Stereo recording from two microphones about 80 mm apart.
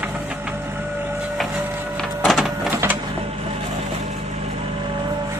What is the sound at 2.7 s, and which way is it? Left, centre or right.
Printer, right.